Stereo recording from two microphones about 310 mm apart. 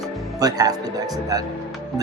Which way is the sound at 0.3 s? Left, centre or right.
Centre.